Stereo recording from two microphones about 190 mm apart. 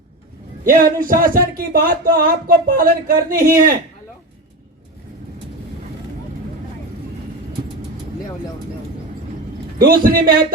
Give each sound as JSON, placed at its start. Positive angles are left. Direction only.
{"t": 0.6, "sound": "speech", "side_deg": -45}
{"t": 9.7, "sound": "speech", "side_deg": -50}